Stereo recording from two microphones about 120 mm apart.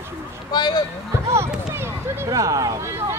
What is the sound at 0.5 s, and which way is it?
Speech, 35° left (ahead or behind).